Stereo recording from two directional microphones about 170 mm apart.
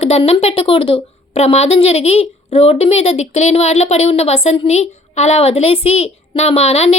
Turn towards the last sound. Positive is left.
turn(degrees=40)  # may be behind; listen again after turning